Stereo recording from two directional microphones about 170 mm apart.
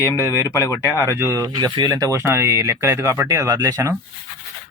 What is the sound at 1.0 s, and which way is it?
Speech, 15° right (ahead or behind).